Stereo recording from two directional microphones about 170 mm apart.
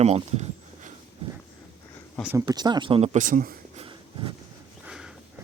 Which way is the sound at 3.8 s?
30° right (ahead or behind).